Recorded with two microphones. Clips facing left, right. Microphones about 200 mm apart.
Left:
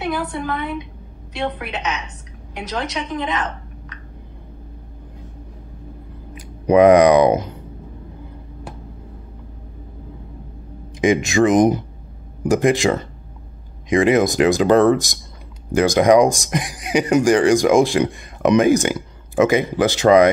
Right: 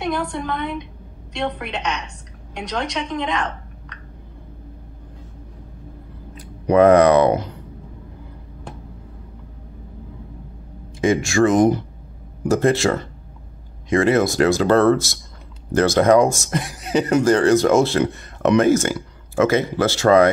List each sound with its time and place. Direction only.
0.0 s a woman's voice: 5° left (ahead or behind)
6.3 s speech: 15° left (ahead or behind)
11.0 s speech: 20° left (ahead or behind)